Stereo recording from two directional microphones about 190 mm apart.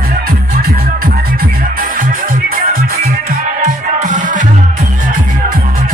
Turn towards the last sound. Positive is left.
turn(degrees=-40)  # may be behind; listen again after turning